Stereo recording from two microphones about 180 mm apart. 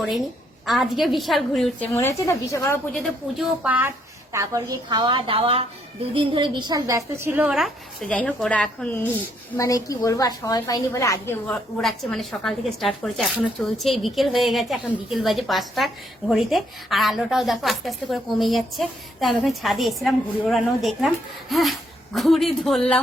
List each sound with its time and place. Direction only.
0.6 s a woman's voice: centre (ahead or behind)
2.0 s a woman's voice: 15° left (ahead or behind)
2.9 s a woman's voice: 5° right (ahead or behind)
9.6 s a woman's voice: 20° left (ahead or behind)
11.4 s a woman's voice: centre (ahead or behind)